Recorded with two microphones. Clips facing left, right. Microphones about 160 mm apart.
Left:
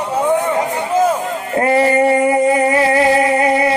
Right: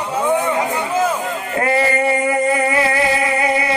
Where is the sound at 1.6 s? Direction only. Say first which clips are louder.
Left 5 dB; 35° left (ahead or behind).